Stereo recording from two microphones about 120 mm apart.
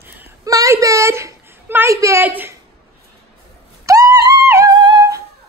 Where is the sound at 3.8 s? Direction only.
25° right (ahead or behind).